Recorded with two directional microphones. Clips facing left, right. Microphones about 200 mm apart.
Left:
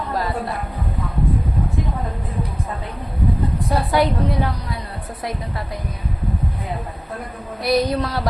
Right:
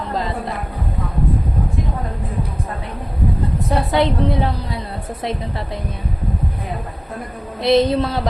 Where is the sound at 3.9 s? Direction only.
25° right (ahead or behind).